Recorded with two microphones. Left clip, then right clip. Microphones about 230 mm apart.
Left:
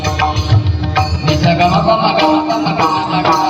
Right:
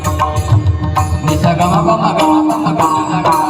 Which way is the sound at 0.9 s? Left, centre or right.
Right.